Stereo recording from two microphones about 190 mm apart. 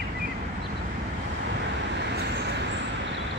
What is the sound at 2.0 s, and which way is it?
Vehicle, 60° right (ahead or behind).